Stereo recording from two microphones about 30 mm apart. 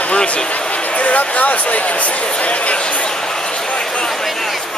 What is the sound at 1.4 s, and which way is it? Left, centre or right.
Speech, left.